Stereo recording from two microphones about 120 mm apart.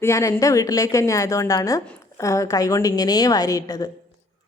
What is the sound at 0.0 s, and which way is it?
A woman's voice, 25° left (ahead or behind).